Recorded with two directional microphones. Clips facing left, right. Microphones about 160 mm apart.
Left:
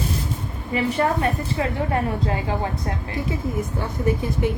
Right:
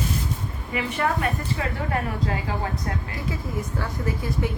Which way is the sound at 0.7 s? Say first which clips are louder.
Left 4 dB; 35° left (ahead or behind).